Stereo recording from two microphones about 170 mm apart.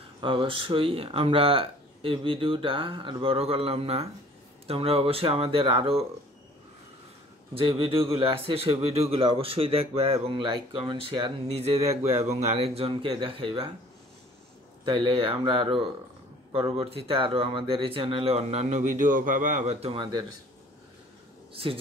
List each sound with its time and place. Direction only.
0.2 s speech: 30° right (ahead or behind)
7.5 s speech: 30° right (ahead or behind)
14.9 s speech: 30° right (ahead or behind)